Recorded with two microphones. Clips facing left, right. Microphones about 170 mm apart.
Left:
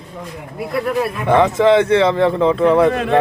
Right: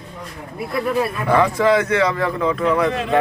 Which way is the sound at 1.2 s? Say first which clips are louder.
Left 4 dB; 20° left (ahead or behind).